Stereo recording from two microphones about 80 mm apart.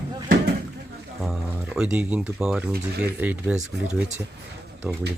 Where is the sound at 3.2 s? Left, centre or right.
Right.